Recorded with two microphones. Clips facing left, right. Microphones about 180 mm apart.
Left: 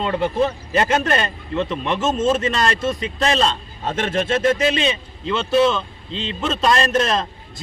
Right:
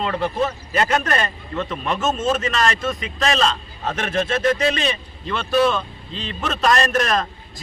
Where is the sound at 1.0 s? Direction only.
30° left (ahead or behind).